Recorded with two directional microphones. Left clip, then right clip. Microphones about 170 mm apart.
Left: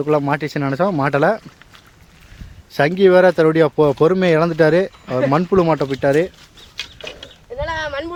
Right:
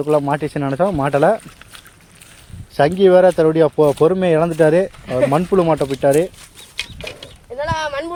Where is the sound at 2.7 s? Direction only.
20° left (ahead or behind).